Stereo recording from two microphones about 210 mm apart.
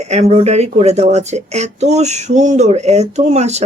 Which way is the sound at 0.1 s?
30° right (ahead or behind).